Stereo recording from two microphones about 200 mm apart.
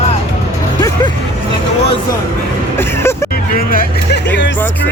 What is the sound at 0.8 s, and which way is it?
Music, 15° left (ahead or behind).